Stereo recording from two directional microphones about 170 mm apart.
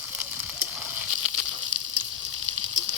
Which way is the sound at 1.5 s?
40° right (ahead or behind).